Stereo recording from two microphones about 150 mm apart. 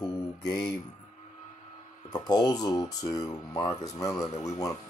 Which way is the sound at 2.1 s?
30° left (ahead or behind).